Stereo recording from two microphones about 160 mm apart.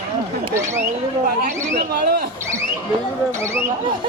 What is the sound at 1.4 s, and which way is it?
Speech, 65° right (ahead or behind).